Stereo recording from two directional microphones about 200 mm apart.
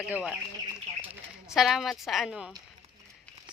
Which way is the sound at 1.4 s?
Centre (ahead or behind).